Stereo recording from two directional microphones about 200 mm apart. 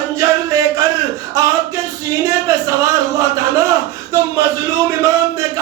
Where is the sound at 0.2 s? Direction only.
15° right (ahead or behind).